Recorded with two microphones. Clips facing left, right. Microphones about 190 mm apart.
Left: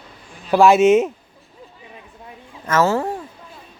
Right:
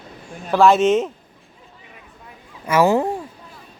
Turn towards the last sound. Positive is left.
turn(degrees=-15)  # may be behind; listen again after turning